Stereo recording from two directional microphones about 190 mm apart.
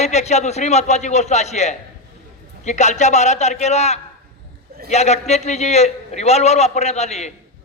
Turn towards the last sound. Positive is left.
turn(degrees=35)  # may be behind; listen again after turning